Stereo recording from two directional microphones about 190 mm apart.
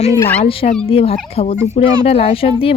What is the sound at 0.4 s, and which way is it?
Speech, 30° left (ahead or behind).